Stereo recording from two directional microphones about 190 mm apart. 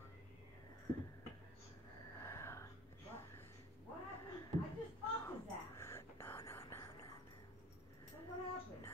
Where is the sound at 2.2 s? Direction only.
15° left (ahead or behind).